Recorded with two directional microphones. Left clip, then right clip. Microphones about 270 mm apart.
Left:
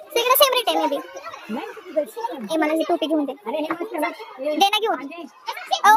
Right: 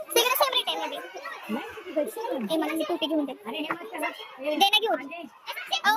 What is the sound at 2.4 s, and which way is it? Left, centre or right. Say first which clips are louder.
Speech: left 9 dB; centre.